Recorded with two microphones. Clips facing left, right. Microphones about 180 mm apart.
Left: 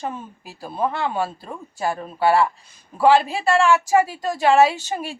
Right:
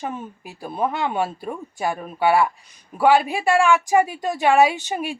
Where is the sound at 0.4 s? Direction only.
15° right (ahead or behind).